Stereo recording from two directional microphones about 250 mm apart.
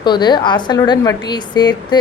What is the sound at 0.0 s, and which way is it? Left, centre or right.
A woman's voice, centre.